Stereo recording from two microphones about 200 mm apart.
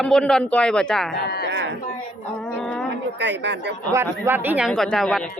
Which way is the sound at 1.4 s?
60° right (ahead or behind).